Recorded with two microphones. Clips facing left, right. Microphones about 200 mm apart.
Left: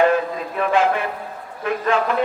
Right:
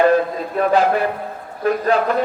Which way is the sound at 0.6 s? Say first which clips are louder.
Right 3 dB; 40° right (ahead or behind).